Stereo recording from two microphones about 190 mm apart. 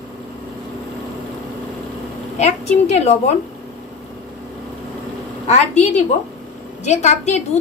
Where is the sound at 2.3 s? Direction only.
35° left (ahead or behind).